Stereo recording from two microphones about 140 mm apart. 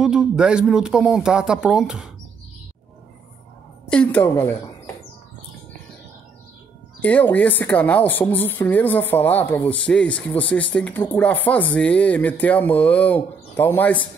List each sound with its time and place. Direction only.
0.0 s speech: 5° right (ahead or behind)
3.9 s speech: 10° left (ahead or behind)
7.0 s speech: 10° left (ahead or behind)